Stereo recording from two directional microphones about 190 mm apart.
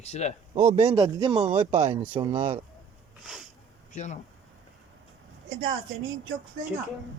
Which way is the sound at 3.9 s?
40° left (ahead or behind).